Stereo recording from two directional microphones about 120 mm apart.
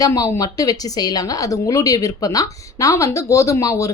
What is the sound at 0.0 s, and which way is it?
Speech, 25° left (ahead or behind).